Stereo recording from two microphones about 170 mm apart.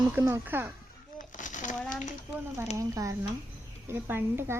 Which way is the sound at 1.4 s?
50° left (ahead or behind).